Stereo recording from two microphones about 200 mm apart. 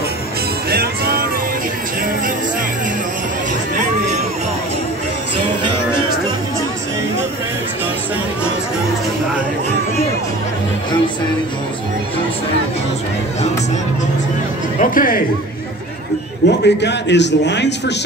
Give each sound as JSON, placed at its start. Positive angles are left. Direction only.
{"t": 0.7, "sound": "music", "side_deg": -50}
{"t": 14.8, "sound": "speech", "side_deg": 45}
{"t": 16.4, "sound": "a man's voice", "side_deg": 60}